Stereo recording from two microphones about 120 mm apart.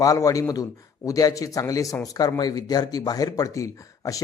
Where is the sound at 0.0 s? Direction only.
30° left (ahead or behind).